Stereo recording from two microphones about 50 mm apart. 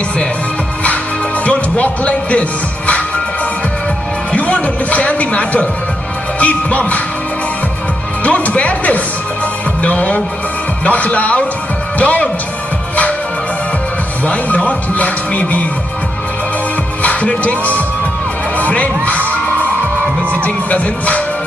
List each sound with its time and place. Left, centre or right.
1.4 s music: left
4.3 s music: left
8.2 s music: left
9.8 s speech: left
12.0 s music: left
14.2 s speech: left
17.0 s music: left
18.6 s speech: left
20.4 s speech: left